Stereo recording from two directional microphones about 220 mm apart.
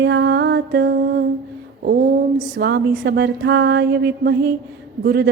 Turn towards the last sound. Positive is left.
turn(degrees=-45)  # may be behind; listen again after turning